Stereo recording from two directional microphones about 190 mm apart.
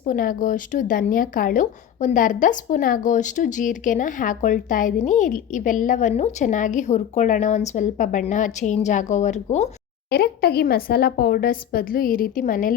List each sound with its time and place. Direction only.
0.0 s speech: 45° left (ahead or behind)
10.1 s speech: 55° left (ahead or behind)